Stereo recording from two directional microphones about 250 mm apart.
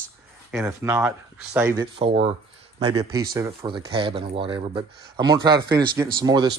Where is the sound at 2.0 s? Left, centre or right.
Right.